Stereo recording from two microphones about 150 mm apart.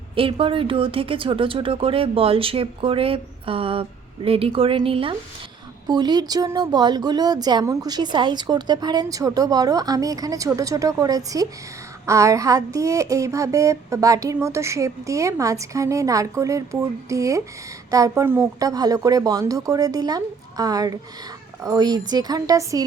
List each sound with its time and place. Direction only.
0.2 s speech: 35° right (ahead or behind)